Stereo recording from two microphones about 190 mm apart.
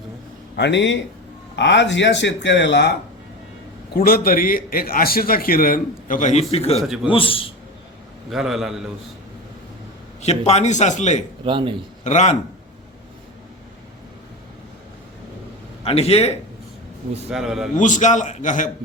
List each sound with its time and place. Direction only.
0.5 s speech: 65° left (ahead or behind)
3.9 s a man's voice: 50° left (ahead or behind); by 6.8 s 30° left (ahead or behind)
6.8 s a man's voice: centre (ahead or behind)
7.1 s a man's voice: 30° left (ahead or behind)
8.3 s a man's voice: centre (ahead or behind)
10.2 s a man's voice: 35° left (ahead or behind)
11.4 s a man's voice: 25° right (ahead or behind)
12.0 s a man's voice: 40° left (ahead or behind)
15.8 s a man's voice: 30° left (ahead or behind)
17.3 s a man's voice: centre (ahead or behind)
17.7 s a man's voice: 40° left (ahead or behind)